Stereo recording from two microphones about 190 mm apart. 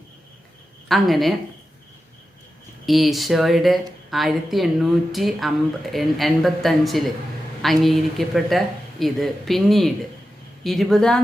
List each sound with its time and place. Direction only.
0.9 s a woman's voice: centre (ahead or behind)
2.8 s a woman's voice: centre (ahead or behind)